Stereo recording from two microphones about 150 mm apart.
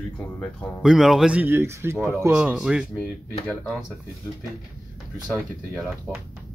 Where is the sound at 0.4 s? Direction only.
Centre (ahead or behind); by 2.0 s 15° right (ahead or behind).